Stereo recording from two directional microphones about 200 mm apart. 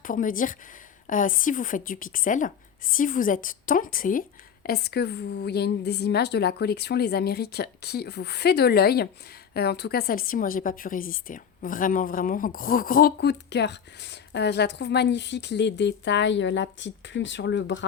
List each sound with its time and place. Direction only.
0.0 s a woman's voice: 40° left (ahead or behind); by 17.8 s 65° left (ahead or behind)